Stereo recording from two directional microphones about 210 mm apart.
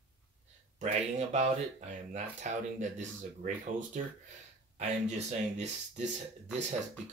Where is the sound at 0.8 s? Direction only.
30° right (ahead or behind).